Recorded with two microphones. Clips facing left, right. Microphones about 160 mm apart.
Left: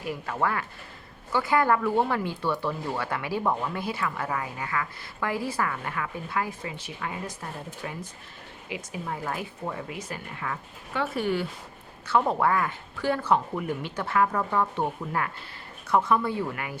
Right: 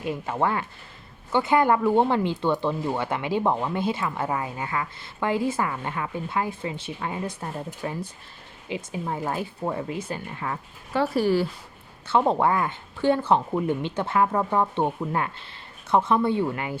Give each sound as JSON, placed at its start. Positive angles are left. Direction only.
{"t": 0.0, "sound": "speech", "side_deg": -25}